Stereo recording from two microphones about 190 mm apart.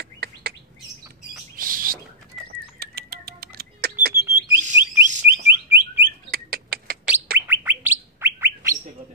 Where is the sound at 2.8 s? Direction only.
55° right (ahead or behind).